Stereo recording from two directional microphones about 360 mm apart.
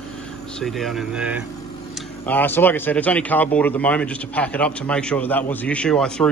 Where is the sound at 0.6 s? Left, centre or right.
Centre.